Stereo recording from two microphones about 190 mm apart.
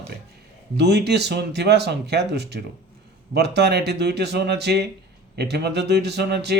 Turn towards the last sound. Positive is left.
turn(degrees=-60)  # may be behind; listen again after turning